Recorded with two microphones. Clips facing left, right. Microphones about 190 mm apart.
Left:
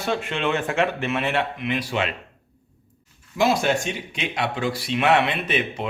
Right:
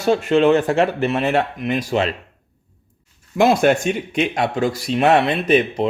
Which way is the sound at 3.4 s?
55° right (ahead or behind).